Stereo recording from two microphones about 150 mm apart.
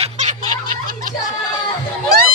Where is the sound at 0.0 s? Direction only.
50° right (ahead or behind).